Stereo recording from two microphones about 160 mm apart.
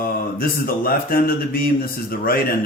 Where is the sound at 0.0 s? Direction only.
65° left (ahead or behind).